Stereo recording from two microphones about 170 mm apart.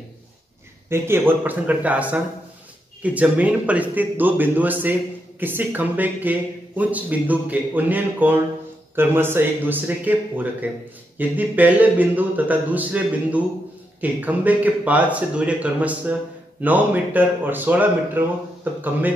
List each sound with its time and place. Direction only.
0.8 s speech: 15° right (ahead or behind)